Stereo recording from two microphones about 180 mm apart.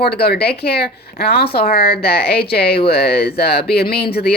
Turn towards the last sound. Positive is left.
turn(degrees=60)  # may be behind; listen again after turning